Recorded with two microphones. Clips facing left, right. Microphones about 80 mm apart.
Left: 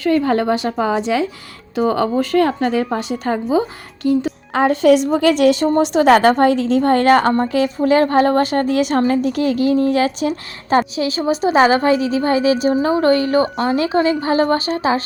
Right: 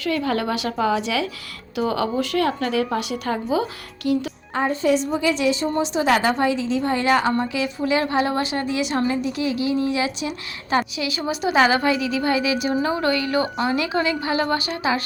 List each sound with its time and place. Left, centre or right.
0.0 s a woman's voice: left
4.5 s a woman's voice: left